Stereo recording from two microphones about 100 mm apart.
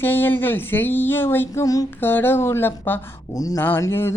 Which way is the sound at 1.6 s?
35° left (ahead or behind).